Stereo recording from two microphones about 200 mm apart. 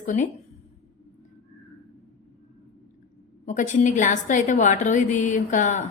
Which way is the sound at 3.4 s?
40° left (ahead or behind).